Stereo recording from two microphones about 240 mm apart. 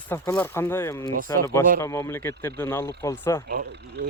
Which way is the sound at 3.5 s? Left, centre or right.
Right.